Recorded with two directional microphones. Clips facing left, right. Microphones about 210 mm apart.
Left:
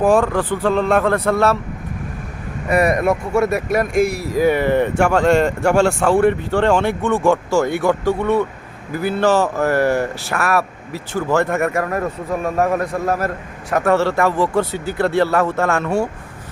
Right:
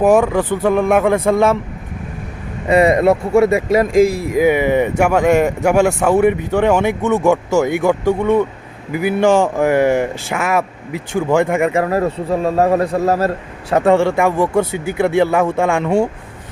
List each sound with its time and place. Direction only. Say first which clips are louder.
0.2 s speech: right 3 dB; 10° right (ahead or behind)
2.6 s a man's voice: right 4 dB; 25° right (ahead or behind)
3.9 s speech: right 6 dB; 90° right
4.2 s speech: right 2 dB; 20° right (ahead or behind)
7.0 s a man's voice: right 2 dB; 20° right (ahead or behind)
7.6 s speech: right 2 dB; 10° right (ahead or behind)
11.7 s a man's voice: right 5 dB; 25° right (ahead or behind)
13.9 s speech: right 1 dB; 15° right (ahead or behind)